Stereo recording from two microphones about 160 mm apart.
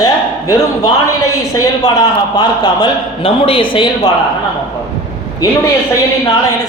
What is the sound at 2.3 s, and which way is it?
Speech, 25° left (ahead or behind).